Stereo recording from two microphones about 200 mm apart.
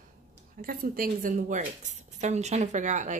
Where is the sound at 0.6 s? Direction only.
45° right (ahead or behind).